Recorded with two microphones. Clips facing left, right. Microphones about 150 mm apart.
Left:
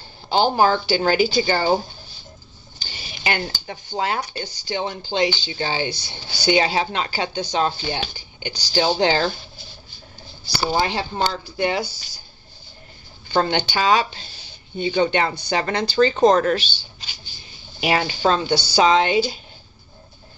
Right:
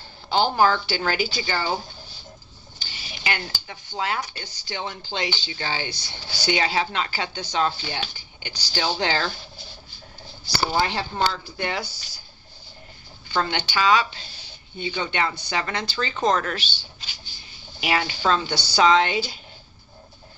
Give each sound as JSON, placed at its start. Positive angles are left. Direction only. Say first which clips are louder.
{"t": 0.3, "sound": "speech", "louder": "left 2 dB", "side_deg": 20}
{"t": 1.4, "sound": "speech", "louder": "left 7 dB", "side_deg": 35}
{"t": 2.9, "sound": "a sound", "louder": "left 4 dB", "side_deg": 35}
{"t": 3.6, "sound": "speech", "louder": "left 2 dB", "side_deg": 35}
{"t": 4.5, "sound": "speech", "louder": "left 6 dB", "side_deg": 20}
{"t": 10.7, "sound": "speech", "louder": "left 4 dB", "side_deg": 15}
{"t": 13.3, "sound": "speech", "louder": "left 5 dB", "side_deg": 30}
{"t": 17.7, "sound": "speech", "louder": "left 4 dB", "side_deg": 30}